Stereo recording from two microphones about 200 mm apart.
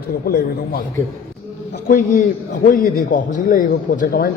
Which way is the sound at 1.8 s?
40° left (ahead or behind).